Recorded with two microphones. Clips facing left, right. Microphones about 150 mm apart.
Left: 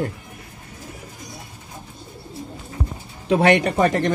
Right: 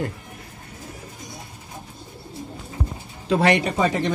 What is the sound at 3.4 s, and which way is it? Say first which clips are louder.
Speech: left 3 dB; 60° left (ahead or behind).